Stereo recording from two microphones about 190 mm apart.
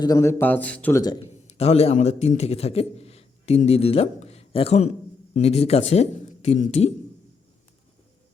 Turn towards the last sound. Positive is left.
turn(degrees=35)  # may be behind; listen again after turning